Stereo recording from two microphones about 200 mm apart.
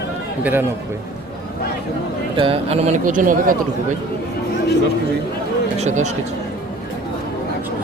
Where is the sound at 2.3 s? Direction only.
25° right (ahead or behind); by 3.5 s 40° right (ahead or behind).